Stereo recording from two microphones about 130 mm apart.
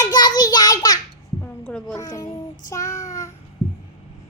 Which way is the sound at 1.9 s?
30° left (ahead or behind).